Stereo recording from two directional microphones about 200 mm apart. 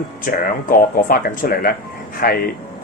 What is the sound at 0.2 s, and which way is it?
Speech, 45° left (ahead or behind).